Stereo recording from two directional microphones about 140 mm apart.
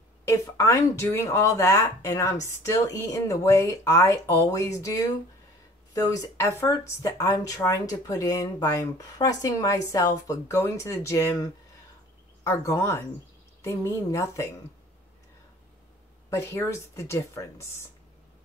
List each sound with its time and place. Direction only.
0.2 s speech: 20° left (ahead or behind)
16.3 s speech: 20° left (ahead or behind)